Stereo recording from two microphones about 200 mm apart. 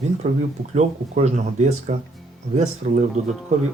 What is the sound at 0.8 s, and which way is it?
Speech, 35° right (ahead or behind).